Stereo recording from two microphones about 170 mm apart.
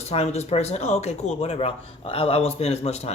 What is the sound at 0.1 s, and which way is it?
Speech, 40° left (ahead or behind).